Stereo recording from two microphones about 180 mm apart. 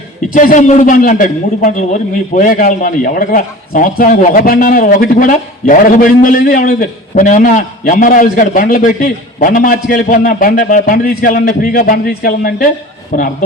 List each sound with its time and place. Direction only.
0.3 s a man's voice: 45° left (ahead or behind)